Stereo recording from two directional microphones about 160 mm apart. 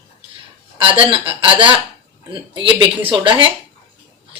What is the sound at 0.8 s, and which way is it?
Speech, 35° right (ahead or behind).